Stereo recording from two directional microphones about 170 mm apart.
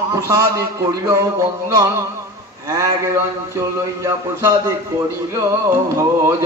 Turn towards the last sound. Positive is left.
turn(degrees=-15)  # may be behind; listen again after turning